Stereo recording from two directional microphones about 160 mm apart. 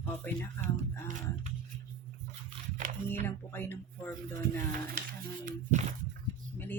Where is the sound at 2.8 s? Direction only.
55° right (ahead or behind).